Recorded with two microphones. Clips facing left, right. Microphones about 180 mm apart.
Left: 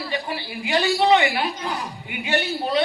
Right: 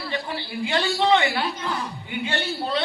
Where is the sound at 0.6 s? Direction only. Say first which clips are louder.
Left 3 dB; 15° left (ahead or behind).